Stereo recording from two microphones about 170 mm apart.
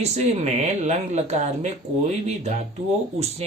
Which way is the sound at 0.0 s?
40° right (ahead or behind).